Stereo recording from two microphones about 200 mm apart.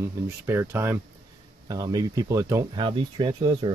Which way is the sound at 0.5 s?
10° right (ahead or behind).